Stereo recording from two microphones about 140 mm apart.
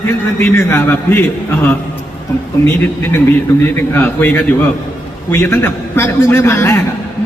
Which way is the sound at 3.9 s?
15° left (ahead or behind).